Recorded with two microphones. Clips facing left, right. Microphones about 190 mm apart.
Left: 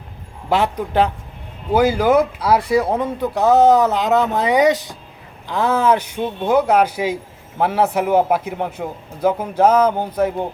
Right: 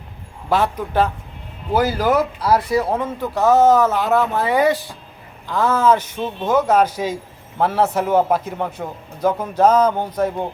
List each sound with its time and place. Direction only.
0.5 s speech: 15° left (ahead or behind)